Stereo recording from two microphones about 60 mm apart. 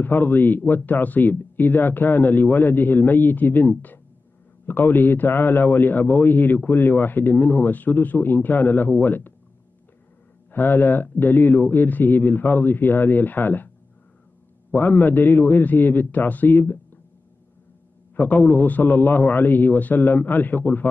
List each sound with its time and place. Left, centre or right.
0.0 s a man's voice: left
10.5 s a man's voice: left
14.7 s a man's voice: left
18.1 s a man's voice: left